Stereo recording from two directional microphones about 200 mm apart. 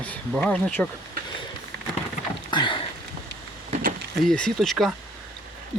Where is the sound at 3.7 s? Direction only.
45° right (ahead or behind).